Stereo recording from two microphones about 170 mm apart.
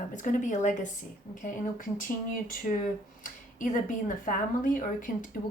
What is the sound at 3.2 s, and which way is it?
Speech, 50° left (ahead or behind).